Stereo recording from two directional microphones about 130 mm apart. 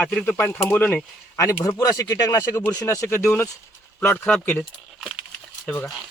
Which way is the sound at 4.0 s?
5° left (ahead or behind).